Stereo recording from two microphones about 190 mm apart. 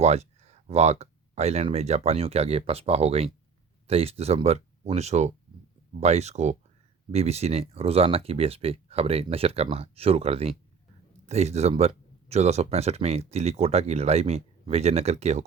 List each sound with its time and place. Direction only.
0.0 s speech: 35° right (ahead or behind)